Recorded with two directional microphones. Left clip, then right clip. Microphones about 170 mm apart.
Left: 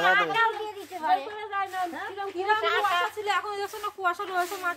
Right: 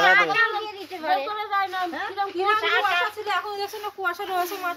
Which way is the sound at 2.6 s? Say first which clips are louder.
Right 3 dB; 10° left (ahead or behind).